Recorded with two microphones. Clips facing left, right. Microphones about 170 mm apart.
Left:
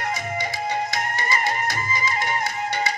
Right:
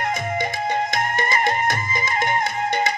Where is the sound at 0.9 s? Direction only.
50° right (ahead or behind).